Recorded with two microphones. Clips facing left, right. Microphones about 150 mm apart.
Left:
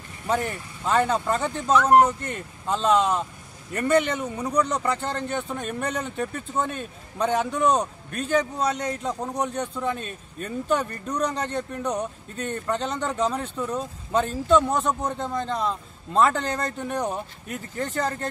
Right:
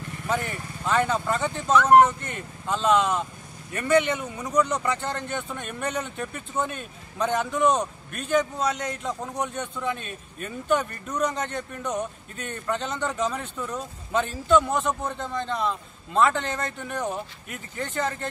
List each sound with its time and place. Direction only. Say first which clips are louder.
0.3 s a man's voice: left 3 dB; 35° left (ahead or behind)